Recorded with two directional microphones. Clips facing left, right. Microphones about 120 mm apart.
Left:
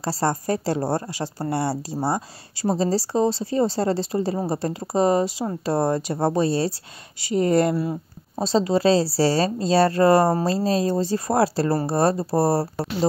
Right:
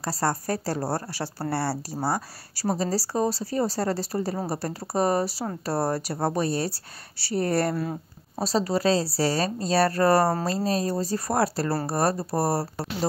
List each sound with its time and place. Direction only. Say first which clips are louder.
0.0 s speech: left 3 dB; 25° left (ahead or behind)
7.8 s a sound: left 4 dB; centre (ahead or behind)
8.5 s speech: left 4 dB; 25° left (ahead or behind)